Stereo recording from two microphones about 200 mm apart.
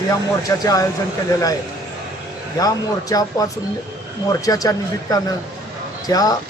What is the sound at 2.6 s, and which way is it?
Speech, 20° left (ahead or behind).